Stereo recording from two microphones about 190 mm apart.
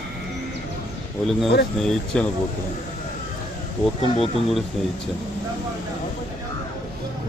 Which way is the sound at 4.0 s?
30° left (ahead or behind).